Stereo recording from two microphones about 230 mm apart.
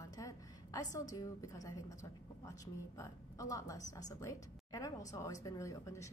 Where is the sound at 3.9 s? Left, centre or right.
Centre.